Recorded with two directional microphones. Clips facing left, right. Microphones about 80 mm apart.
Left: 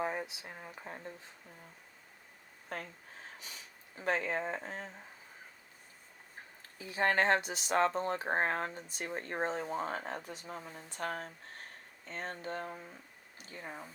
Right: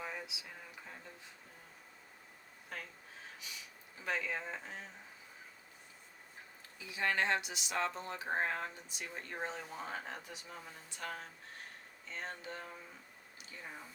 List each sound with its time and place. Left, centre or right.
0.0 s a sound: left
2.7 s speech: left
6.7 s speech: left